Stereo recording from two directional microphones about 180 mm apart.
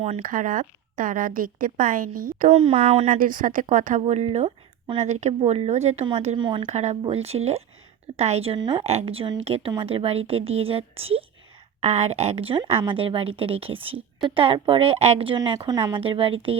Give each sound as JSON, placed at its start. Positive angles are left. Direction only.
{"t": 0.2, "sound": "a woman's voice", "side_deg": -50}
{"t": 2.5, "sound": "speech", "side_deg": -35}
{"t": 3.2, "sound": "speech", "side_deg": -50}
{"t": 6.7, "sound": "a woman's voice", "side_deg": -40}